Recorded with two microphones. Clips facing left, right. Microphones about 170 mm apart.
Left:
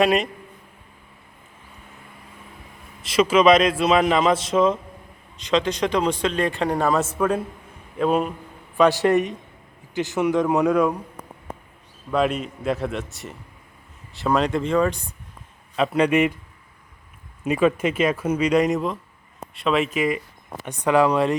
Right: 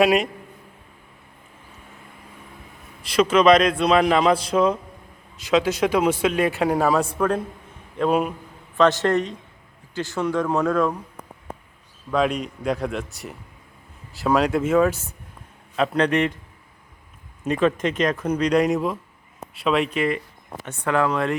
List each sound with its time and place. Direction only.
0.0 s a man's voice: centre (ahead or behind)
3.0 s a man's voice: 5° left (ahead or behind)
8.8 s speech: 15° left (ahead or behind)
12.1 s a man's voice: 5° left (ahead or behind)
17.4 s a man's voice: 10° left (ahead or behind)